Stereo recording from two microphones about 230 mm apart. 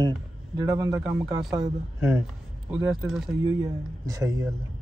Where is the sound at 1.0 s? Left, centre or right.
Centre.